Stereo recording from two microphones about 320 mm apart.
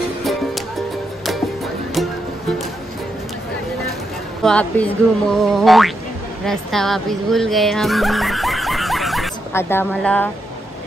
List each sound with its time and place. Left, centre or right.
0.2 s music: centre
4.4 s speech: centre